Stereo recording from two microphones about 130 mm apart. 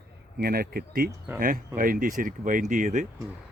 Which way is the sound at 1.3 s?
90° right.